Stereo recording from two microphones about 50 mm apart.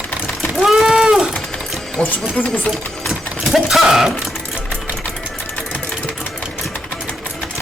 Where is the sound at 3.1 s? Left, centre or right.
Centre.